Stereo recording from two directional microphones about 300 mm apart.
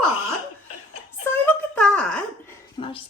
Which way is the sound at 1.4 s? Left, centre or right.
Centre.